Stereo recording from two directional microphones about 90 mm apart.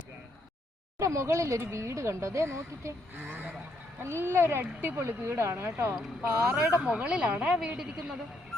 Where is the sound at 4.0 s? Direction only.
30° right (ahead or behind).